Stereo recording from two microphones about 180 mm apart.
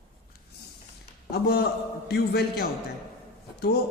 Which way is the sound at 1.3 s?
65° left (ahead or behind).